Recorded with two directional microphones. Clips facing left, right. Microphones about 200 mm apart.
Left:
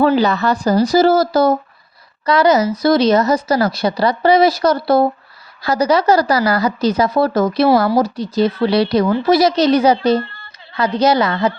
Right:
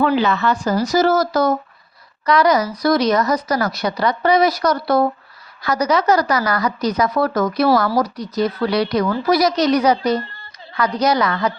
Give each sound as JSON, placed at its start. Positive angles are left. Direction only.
{"t": 0.0, "sound": "a woman's voice", "side_deg": 35}